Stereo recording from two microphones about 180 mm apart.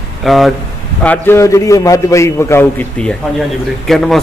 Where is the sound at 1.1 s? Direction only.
15° left (ahead or behind).